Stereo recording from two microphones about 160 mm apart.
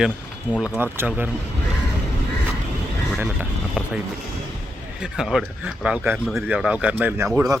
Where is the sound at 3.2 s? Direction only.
10° right (ahead or behind).